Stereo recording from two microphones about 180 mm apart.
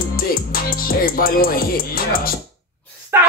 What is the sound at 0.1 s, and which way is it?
Music, 55° left (ahead or behind).